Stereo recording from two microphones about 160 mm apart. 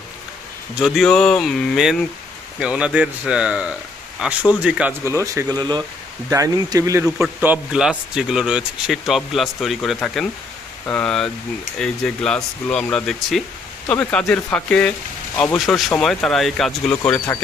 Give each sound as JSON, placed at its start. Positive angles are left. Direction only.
{"t": 0.8, "sound": "a man's voice", "side_deg": 0}
{"t": 5.0, "sound": "speech", "side_deg": -20}
{"t": 7.2, "sound": "a man's voice", "side_deg": -10}